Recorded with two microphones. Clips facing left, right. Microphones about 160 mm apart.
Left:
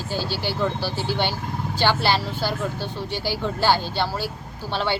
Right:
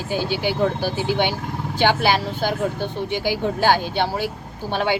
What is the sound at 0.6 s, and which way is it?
Speech, 50° right (ahead or behind).